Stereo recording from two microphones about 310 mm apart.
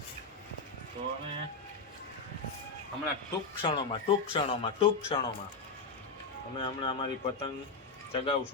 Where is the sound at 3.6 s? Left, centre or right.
Centre.